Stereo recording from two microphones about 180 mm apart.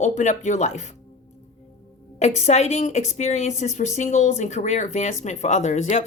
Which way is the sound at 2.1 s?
40° left (ahead or behind).